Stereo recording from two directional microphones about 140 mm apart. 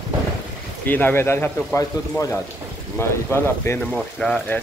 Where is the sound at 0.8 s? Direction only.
15° left (ahead or behind).